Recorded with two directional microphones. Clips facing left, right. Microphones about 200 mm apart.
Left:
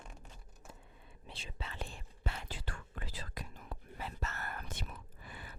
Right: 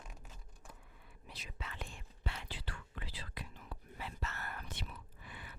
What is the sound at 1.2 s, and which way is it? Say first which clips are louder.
Whispering: left 2 dB; 30° left (ahead or behind).